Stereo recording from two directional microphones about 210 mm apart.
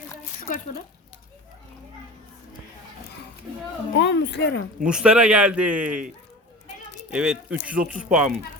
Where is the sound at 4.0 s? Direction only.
55° left (ahead or behind).